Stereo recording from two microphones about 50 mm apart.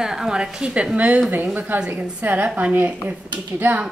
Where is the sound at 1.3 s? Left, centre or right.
Right.